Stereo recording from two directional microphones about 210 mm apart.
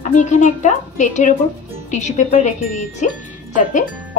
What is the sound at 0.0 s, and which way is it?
Speech, 35° left (ahead or behind).